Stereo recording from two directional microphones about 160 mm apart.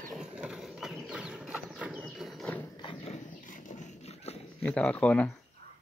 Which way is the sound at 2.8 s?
35° left (ahead or behind).